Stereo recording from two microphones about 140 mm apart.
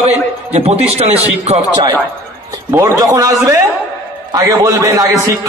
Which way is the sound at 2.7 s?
15° right (ahead or behind).